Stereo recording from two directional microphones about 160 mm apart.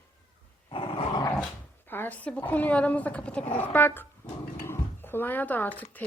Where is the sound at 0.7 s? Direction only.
35° left (ahead or behind).